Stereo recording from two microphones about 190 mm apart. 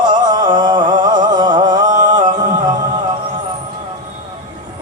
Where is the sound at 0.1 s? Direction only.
20° right (ahead or behind).